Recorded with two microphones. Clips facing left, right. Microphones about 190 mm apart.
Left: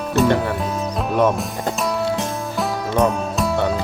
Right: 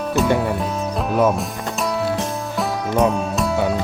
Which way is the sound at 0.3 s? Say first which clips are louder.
Even; centre (ahead or behind).